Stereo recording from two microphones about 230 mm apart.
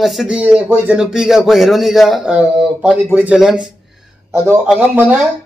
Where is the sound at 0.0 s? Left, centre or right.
Centre.